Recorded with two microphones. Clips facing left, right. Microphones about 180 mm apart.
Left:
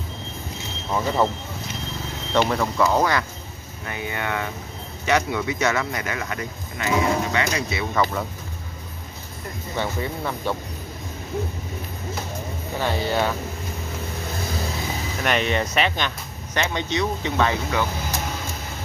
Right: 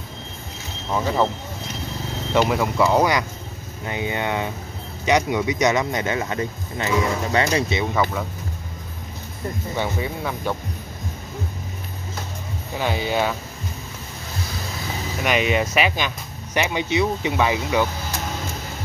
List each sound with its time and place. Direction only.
0.9 s speech: centre (ahead or behind)
2.3 s speech: 10° right (ahead or behind); by 7.8 s 30° right (ahead or behind)
7.9 s speech: 5° right (ahead or behind)
9.8 s speech: 10° right (ahead or behind)
12.8 s speech: 10° right (ahead or behind)
15.2 s speech: 5° right (ahead or behind)